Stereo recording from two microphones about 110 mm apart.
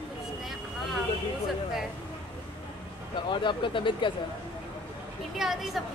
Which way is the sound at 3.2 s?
45° left (ahead or behind).